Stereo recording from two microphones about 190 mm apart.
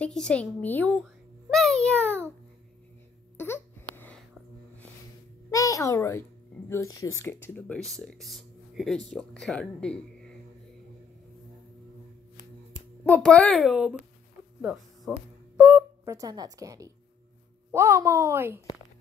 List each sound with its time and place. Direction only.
0.0 s a woman's voice: 5° left (ahead or behind)
3.3 s babbling: 10° left (ahead or behind)
5.5 s a child's voice: 15° left (ahead or behind)
13.1 s a woman's voice: 5° left (ahead or behind); by 18.6 s 15° right (ahead or behind)